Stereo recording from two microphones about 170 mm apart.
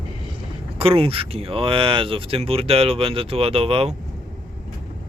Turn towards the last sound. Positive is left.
turn(degrees=-35)  # may be behind; listen again after turning